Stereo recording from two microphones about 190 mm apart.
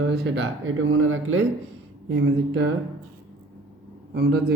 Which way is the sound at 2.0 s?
65° right (ahead or behind).